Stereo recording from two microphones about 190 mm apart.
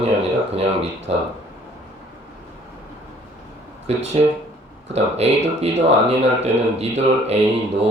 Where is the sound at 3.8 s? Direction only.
35° right (ahead or behind).